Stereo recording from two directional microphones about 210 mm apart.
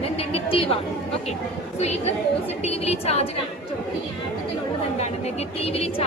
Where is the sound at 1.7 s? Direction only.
30° left (ahead or behind).